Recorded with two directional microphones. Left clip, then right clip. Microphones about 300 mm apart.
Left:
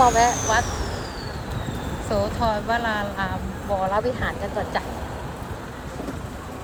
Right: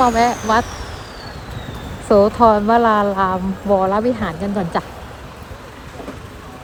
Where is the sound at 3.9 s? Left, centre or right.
Left.